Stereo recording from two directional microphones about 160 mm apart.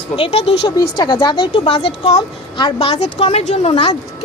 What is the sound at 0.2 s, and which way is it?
Speech, 40° left (ahead or behind).